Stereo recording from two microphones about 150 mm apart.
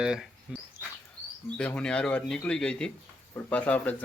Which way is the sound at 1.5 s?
5° left (ahead or behind).